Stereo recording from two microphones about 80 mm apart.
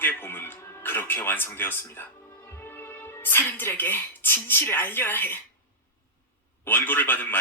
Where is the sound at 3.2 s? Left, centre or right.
Left.